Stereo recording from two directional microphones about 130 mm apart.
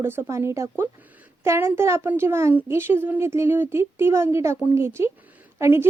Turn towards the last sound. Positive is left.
turn(degrees=-20)  # may be behind; listen again after turning